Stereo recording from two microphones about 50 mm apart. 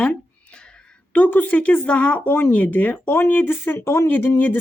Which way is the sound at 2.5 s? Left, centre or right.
Left.